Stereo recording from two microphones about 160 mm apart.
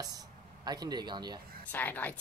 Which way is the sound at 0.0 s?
25° right (ahead or behind).